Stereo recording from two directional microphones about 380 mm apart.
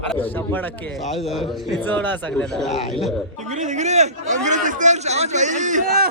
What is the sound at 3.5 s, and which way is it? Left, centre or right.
A man's voice, centre.